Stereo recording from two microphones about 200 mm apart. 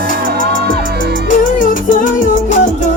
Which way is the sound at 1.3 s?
40° left (ahead or behind).